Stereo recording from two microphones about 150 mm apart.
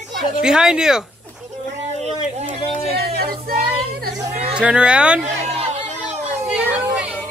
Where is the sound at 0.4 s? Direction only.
5° right (ahead or behind).